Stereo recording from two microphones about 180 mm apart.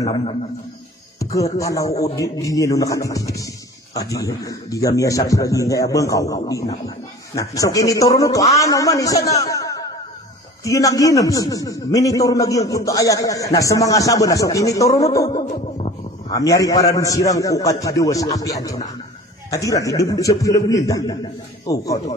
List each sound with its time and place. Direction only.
0.0 s a man's voice: 30° left (ahead or behind)
1.2 s a man's voice: 20° left (ahead or behind)